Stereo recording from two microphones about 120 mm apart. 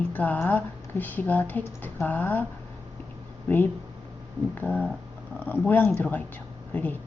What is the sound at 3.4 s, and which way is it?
Speech, 15° left (ahead or behind).